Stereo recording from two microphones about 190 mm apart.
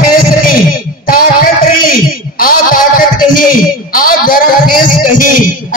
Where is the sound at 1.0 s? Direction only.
50° left (ahead or behind).